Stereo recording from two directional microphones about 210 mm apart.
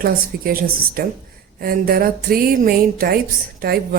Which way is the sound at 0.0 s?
45° right (ahead or behind).